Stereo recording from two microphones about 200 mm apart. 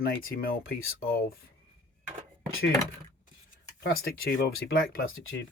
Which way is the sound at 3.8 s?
50° left (ahead or behind).